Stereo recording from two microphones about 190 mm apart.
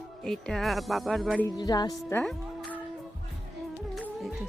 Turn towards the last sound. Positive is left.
turn(degrees=-5)  # may be behind; listen again after turning